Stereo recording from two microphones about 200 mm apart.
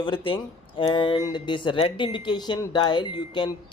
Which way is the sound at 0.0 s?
25° left (ahead or behind).